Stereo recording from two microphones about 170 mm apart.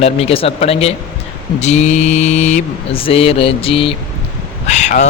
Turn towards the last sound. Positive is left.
turn(degrees=45)  # may be behind; listen again after turning